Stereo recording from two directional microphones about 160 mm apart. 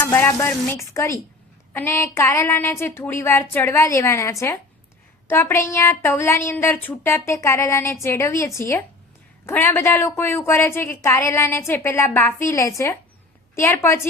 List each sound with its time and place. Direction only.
0.0 s speech: 15° left (ahead or behind)